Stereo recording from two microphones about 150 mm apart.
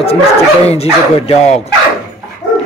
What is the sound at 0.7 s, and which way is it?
Speech, 45° left (ahead or behind).